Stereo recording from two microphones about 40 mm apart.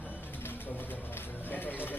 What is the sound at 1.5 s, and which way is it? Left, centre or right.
Speech, left.